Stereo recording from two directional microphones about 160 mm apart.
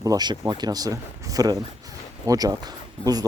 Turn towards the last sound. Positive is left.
turn(degrees=-25)  # may be behind; listen again after turning